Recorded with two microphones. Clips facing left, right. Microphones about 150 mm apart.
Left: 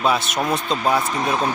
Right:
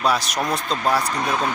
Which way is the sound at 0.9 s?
20° left (ahead or behind).